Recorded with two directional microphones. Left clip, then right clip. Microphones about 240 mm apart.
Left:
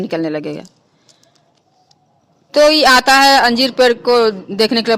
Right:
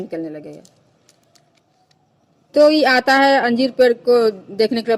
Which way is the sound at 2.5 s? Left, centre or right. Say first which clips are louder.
Left 3 dB; centre.